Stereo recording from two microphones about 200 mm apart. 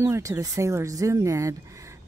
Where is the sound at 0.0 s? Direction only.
15° right (ahead or behind).